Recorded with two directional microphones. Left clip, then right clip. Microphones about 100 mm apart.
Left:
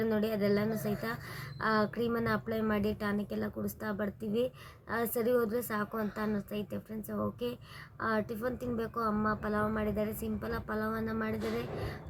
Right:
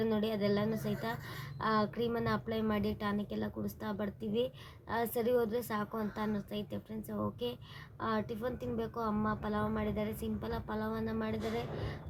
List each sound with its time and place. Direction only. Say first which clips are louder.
0.0 s a woman's voice: left 2 dB; 10° left (ahead or behind)